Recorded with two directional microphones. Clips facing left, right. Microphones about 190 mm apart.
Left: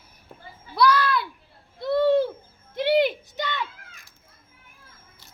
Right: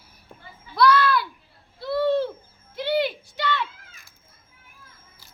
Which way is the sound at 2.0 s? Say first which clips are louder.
Left 2 dB; 15° left (ahead or behind).